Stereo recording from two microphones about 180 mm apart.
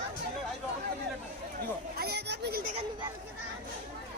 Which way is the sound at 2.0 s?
65° right (ahead or behind).